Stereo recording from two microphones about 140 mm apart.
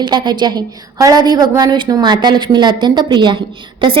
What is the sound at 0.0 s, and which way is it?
A woman's voice, 35° right (ahead or behind).